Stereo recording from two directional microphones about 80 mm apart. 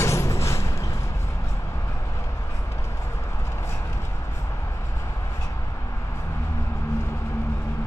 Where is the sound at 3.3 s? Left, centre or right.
Left.